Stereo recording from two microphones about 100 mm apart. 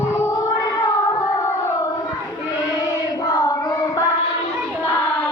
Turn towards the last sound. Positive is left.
turn(degrees=35)  # may be behind; listen again after turning